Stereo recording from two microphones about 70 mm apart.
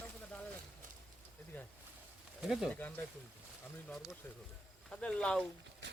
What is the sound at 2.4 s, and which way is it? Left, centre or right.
Speech, centre.